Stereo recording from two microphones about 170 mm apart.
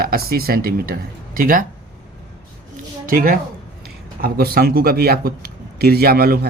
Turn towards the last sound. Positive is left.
turn(degrees=-65)  # may be behind; listen again after turning